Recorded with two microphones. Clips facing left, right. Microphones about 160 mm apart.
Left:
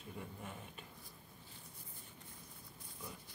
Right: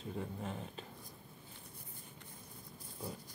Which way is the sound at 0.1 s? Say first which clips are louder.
Right 6 dB; 30° right (ahead or behind).